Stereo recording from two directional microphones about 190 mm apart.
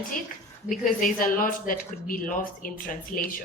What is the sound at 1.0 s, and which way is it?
Speech, 45° left (ahead or behind).